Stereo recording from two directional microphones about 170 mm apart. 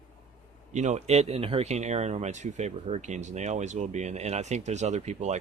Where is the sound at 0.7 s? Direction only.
45° right (ahead or behind).